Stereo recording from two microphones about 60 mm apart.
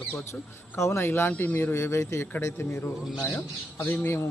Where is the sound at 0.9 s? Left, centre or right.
Left.